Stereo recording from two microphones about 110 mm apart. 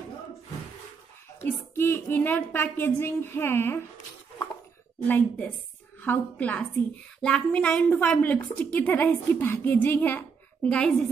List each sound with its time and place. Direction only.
1.4 s speech: 20° left (ahead or behind)
5.0 s a woman's voice: 15° left (ahead or behind)